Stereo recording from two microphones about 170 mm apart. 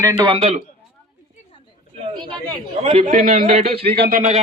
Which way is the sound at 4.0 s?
60° right (ahead or behind).